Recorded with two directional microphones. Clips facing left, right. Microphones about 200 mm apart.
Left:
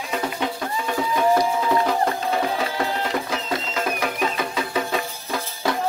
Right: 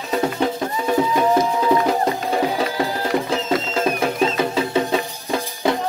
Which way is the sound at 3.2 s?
30° right (ahead or behind).